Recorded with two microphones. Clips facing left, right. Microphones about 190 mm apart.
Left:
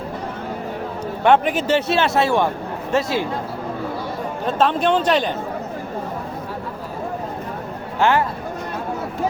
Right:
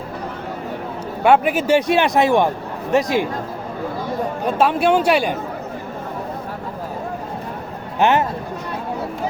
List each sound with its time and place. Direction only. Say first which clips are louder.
1.2 s a man's voice: right 1 dB; 10° right (ahead or behind)
4.4 s a man's voice: right 1 dB; 10° right (ahead or behind)
7.9 s speech: right 1 dB; 20° right (ahead or behind)